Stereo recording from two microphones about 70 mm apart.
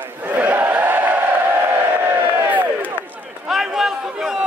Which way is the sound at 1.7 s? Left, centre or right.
Right.